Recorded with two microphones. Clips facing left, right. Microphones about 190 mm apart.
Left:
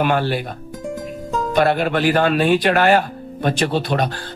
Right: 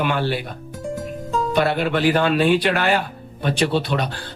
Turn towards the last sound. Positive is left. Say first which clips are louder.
# left 2 dB
turn(degrees=50)  # may be behind; listen again after turning